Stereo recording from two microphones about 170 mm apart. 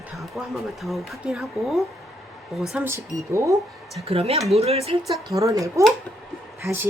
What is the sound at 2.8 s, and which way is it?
Speech, 15° right (ahead or behind).